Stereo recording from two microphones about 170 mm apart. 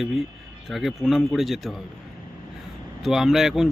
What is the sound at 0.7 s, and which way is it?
Speech, centre (ahead or behind).